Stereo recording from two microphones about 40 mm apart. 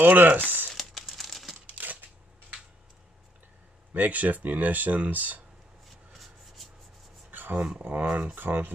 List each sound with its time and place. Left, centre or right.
0.0 s speech: right
0.7 s crumpling: centre
1.8 s a sound: right
3.9 s speech: right
5.9 s rub: centre
7.2 s a sound: right
7.8 s speech: right
8.4 s speech: right